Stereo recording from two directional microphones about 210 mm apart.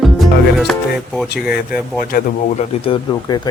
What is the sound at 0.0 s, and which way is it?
Music, centre (ahead or behind).